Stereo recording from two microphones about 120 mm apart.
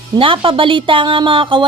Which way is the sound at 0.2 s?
45° right (ahead or behind).